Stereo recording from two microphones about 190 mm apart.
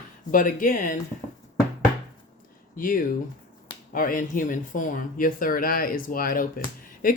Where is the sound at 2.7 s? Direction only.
45° left (ahead or behind).